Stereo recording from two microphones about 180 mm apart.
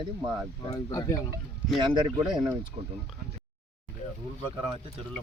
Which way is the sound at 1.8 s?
25° right (ahead or behind).